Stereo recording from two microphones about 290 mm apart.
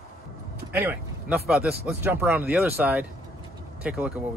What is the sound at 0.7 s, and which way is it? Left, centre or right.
Speech, centre.